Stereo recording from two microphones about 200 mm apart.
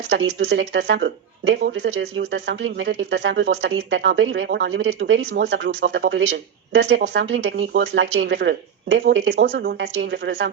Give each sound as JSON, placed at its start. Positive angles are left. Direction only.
{"t": 0.1, "sound": "speech", "side_deg": -65}